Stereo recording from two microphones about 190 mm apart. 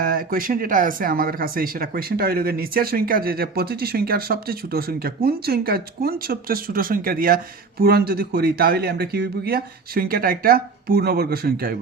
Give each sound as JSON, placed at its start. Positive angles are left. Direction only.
{"t": 0.0, "sound": "speech", "side_deg": -50}